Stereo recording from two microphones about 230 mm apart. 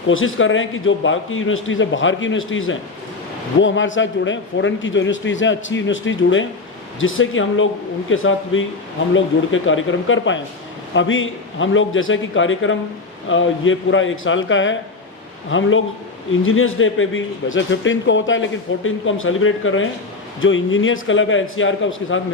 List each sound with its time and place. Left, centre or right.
0.1 s a man's voice: left